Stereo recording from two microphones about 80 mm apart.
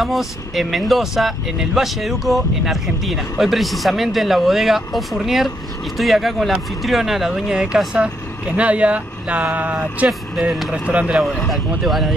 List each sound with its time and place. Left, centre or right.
0.0 s speech: centre
11.4 s speech: centre